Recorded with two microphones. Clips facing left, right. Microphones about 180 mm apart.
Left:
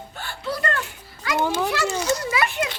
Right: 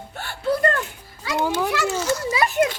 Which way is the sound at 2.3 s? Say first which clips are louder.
Right 4 dB; 35° right (ahead or behind).